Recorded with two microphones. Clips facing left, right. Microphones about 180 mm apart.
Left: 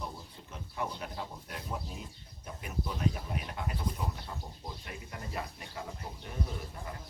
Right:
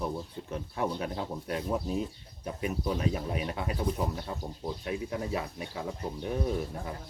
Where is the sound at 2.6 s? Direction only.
70° right (ahead or behind); by 3.7 s 90° right.